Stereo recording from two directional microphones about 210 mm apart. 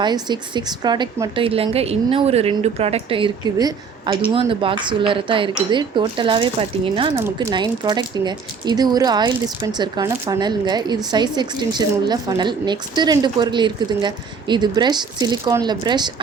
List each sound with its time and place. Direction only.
0.0 s a woman's voice: 20° right (ahead or behind)